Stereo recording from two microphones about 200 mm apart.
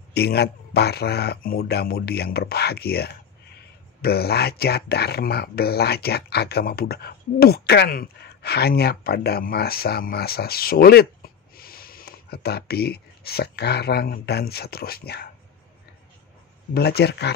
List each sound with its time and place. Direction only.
0.1 s speech: 55° left (ahead or behind)
16.7 s speech: 55° left (ahead or behind)